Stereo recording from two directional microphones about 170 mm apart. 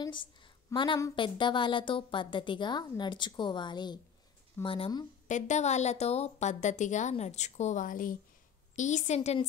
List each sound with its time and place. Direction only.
0.0 s a sound: 30° left (ahead or behind)
0.7 s a woman's voice: 25° left (ahead or behind)
5.3 s a woman's voice: 45° left (ahead or behind)